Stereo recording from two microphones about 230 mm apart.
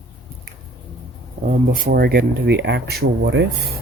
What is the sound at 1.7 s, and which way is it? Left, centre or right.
Speech, right.